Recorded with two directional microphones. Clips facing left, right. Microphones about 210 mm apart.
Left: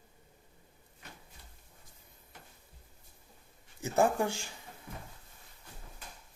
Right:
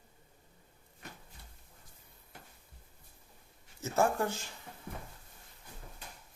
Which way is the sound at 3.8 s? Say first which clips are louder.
Left 2 dB; 15° left (ahead or behind).